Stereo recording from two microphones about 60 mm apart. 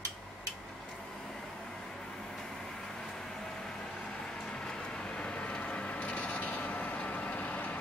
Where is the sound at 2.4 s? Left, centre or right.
Centre.